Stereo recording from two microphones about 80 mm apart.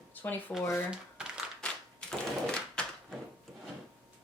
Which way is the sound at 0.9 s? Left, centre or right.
Centre.